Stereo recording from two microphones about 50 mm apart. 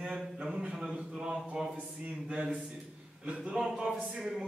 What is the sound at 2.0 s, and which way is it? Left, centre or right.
A man's voice, right.